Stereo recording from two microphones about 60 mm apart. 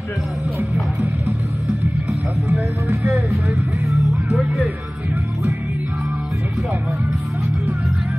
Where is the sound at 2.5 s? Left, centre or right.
Right.